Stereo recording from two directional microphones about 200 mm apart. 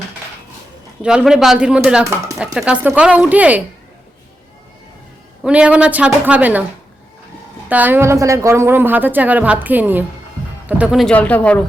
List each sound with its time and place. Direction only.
1.0 s a woman's voice: 5° right (ahead or behind)
5.4 s a woman's voice: 5° right (ahead or behind)
7.7 s a woman's voice: 10° right (ahead or behind); by 11.6 s 5° left (ahead or behind)